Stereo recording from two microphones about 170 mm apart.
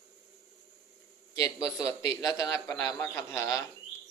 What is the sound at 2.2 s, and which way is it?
A man's voice, 20° left (ahead or behind).